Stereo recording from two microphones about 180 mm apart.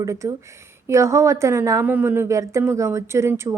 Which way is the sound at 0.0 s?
15° right (ahead or behind).